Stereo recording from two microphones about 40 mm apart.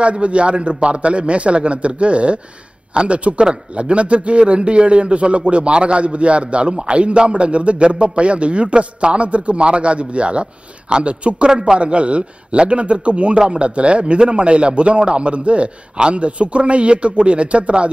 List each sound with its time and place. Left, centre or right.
0.0 s a man's voice: right
11.9 s a man's voice: right